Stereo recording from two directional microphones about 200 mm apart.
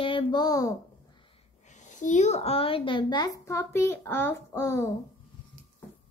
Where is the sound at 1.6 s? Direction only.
35° left (ahead or behind); by 3.3 s 20° left (ahead or behind).